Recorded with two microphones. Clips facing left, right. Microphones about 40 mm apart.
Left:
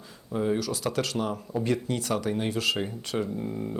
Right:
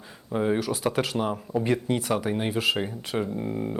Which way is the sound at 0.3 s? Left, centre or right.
Right.